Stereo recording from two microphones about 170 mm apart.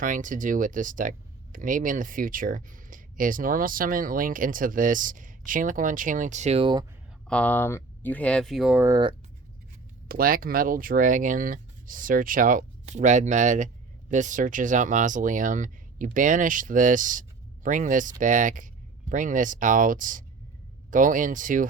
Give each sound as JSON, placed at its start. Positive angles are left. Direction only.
{"t": 0.0, "sound": "speech", "side_deg": -50}
{"t": 7.3, "sound": "speech", "side_deg": 10}
{"t": 8.9, "sound": "speech", "side_deg": -25}
{"t": 10.1, "sound": "speech", "side_deg": -60}